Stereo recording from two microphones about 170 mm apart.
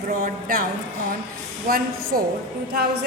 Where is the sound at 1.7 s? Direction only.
60° right (ahead or behind).